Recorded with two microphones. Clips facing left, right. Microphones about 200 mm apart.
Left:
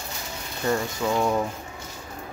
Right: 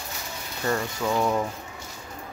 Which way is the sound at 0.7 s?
5° left (ahead or behind).